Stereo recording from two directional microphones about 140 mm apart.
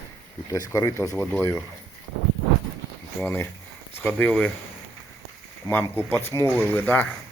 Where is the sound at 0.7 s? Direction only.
20° left (ahead or behind).